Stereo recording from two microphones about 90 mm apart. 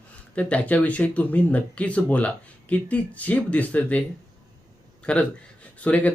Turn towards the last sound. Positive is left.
turn(degrees=15)  # may be behind; listen again after turning